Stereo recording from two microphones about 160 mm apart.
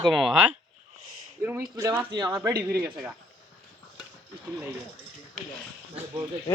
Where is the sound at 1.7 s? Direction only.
25° right (ahead or behind).